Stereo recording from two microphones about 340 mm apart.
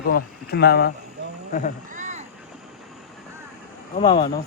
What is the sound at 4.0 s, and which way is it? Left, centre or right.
Speech, centre.